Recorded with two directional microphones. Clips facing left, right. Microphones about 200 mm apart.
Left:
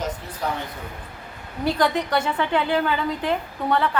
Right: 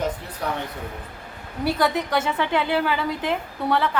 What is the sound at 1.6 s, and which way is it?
A woman's voice, 10° right (ahead or behind).